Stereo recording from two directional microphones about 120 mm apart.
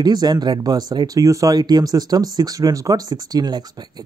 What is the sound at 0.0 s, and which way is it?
Speech, 35° right (ahead or behind).